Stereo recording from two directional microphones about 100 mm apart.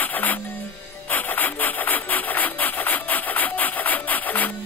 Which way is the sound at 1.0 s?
20° left (ahead or behind).